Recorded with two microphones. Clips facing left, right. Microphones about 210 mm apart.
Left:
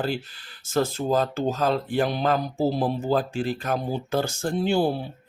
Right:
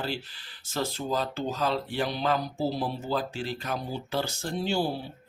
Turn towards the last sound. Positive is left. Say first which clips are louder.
# left 6 dB
turn(degrees=55)  # may be behind; listen again after turning